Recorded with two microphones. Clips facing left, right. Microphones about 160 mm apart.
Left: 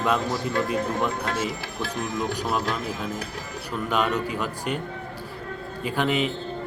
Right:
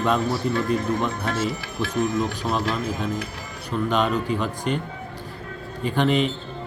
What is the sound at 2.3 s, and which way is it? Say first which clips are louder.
Speech: right 1 dB; 10° left (ahead or behind).